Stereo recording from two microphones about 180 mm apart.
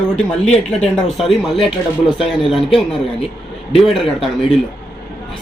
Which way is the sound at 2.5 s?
Centre (ahead or behind).